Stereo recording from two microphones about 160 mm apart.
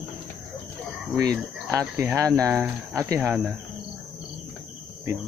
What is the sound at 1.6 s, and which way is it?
Speech, 15° right (ahead or behind).